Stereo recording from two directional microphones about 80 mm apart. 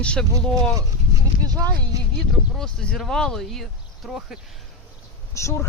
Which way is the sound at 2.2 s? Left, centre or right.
Centre.